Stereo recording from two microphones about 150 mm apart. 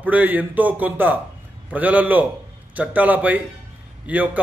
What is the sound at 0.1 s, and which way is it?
A man's voice, 10° right (ahead or behind).